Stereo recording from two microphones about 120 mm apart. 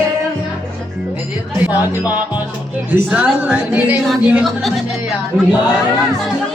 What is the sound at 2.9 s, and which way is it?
A woman's voice, 10° right (ahead or behind).